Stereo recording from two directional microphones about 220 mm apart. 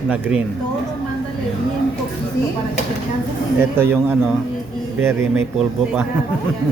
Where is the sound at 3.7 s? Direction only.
10° right (ahead or behind).